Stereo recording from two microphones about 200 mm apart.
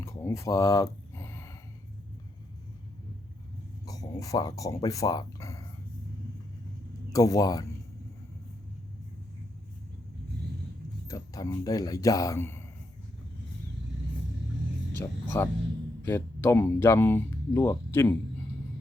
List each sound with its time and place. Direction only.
0.0 s a sound: 10° left (ahead or behind)
3.8 s speech: 15° left (ahead or behind)
7.1 s speech: 15° left (ahead or behind)
11.1 s speech: 15° left (ahead or behind)
14.9 s speech: 10° left (ahead or behind)